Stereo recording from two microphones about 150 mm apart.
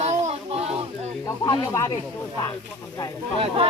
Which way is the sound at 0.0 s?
50° right (ahead or behind).